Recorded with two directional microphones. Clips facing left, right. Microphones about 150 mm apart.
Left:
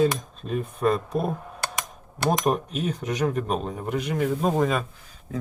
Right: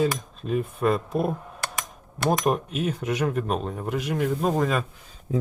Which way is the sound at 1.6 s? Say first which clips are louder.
Left 2 dB; 20° left (ahead or behind).